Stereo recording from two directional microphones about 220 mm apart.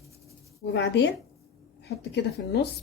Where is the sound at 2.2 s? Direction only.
50° left (ahead or behind).